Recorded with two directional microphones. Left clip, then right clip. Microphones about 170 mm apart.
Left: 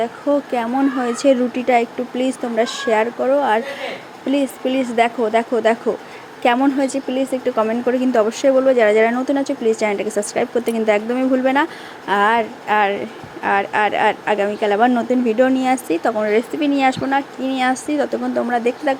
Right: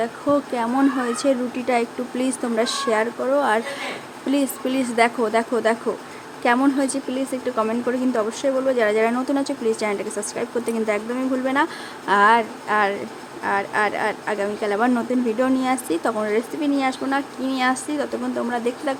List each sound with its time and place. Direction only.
0.0 s speech: 10° left (ahead or behind)
12.0 s speech: 5° left (ahead or behind)